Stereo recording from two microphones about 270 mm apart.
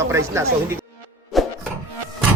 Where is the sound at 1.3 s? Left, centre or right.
Centre.